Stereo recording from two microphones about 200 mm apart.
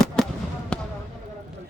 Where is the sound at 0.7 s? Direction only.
5° left (ahead or behind).